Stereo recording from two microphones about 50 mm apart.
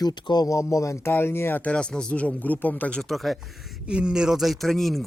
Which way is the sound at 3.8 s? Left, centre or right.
Centre.